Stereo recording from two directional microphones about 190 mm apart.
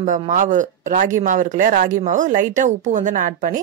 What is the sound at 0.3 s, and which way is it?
A woman's voice, 40° right (ahead or behind).